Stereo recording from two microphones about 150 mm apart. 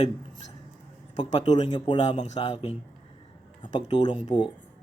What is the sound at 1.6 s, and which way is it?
Speech, 30° left (ahead or behind).